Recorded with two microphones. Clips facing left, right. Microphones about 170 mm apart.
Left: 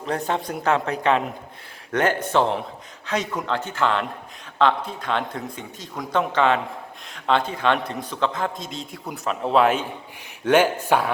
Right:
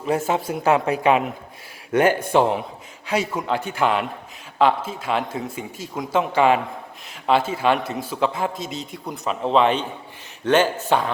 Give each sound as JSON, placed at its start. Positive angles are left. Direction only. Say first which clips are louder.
{"t": 0.0, "sound": "a man's voice", "louder": "right 3 dB", "side_deg": -5}